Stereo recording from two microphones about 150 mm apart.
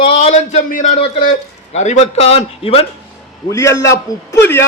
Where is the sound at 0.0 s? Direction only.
45° left (ahead or behind).